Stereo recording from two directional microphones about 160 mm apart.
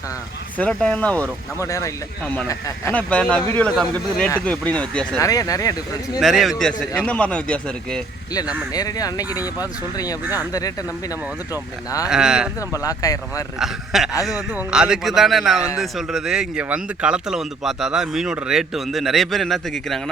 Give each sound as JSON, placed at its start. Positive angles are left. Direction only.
{"t": 0.6, "sound": "speech", "side_deg": 5}
{"t": 1.5, "sound": "speech", "side_deg": 20}
{"t": 2.9, "sound": "speech", "side_deg": 10}
{"t": 5.2, "sound": "speech", "side_deg": 20}
{"t": 6.1, "sound": "speech", "side_deg": 0}
{"t": 8.7, "sound": "speech", "side_deg": 25}
{"t": 12.0, "sound": "speech", "side_deg": -5}
{"t": 12.8, "sound": "speech", "side_deg": 20}
{"t": 13.6, "sound": "speech", "side_deg": 0}